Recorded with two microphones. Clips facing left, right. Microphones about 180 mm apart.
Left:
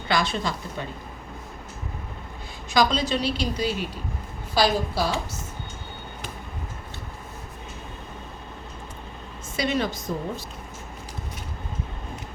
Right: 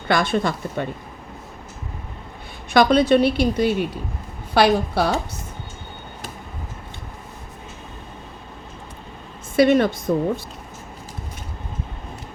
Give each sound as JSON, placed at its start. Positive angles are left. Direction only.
{"t": 0.1, "sound": "speech", "side_deg": -55}
{"t": 2.7, "sound": "a woman's voice", "side_deg": -60}
{"t": 9.6, "sound": "a woman's voice", "side_deg": -55}